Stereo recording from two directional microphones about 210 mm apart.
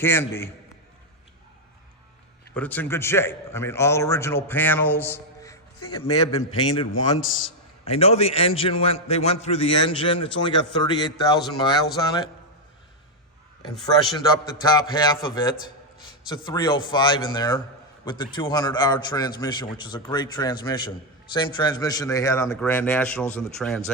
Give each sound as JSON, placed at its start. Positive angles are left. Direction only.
{"t": 0.0, "sound": "a man's voice", "side_deg": 10}
{"t": 2.6, "sound": "a man's voice", "side_deg": 10}
{"t": 7.9, "sound": "a man's voice", "side_deg": 30}
{"t": 14.2, "sound": "a man's voice", "side_deg": 20}